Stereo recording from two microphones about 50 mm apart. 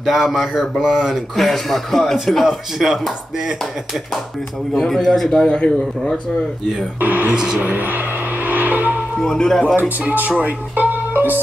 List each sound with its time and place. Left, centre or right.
0.0 s speech: centre
1.1 s speech: centre
2.4 s speech: centre
4.7 s speech: centre
5.3 s speech: centre
7.0 s speech: right
7.3 s speech: centre
7.6 s speech: right
8.5 s music: right
9.2 s speech: centre
9.8 s speech: right